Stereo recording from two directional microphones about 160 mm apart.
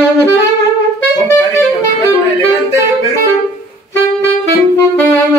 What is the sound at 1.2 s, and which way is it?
Saxophone, 20° left (ahead or behind).